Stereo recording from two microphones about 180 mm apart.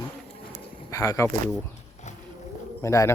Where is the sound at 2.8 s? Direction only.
15° left (ahead or behind).